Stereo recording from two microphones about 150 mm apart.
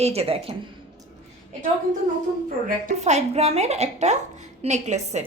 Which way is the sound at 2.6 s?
55° right (ahead or behind).